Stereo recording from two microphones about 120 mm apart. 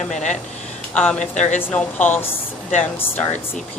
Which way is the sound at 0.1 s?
80° left.